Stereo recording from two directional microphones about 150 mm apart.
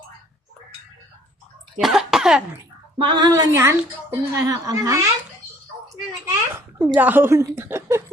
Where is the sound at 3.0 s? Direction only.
30° right (ahead or behind).